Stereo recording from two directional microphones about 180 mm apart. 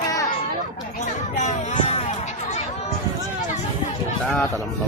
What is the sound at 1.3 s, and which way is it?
Music, 40° left (ahead or behind).